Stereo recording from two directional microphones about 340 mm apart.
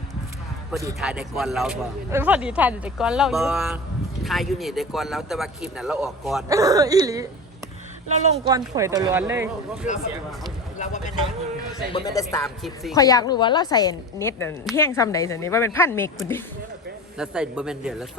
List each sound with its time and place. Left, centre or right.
0.7 s speech: centre
8.3 s speech: centre
10.8 s a woman's voice: left
12.2 s speech: centre
12.9 s a woman's voice: centre